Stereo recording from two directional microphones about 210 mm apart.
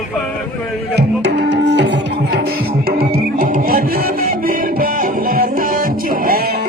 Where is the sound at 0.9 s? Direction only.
55° right (ahead or behind).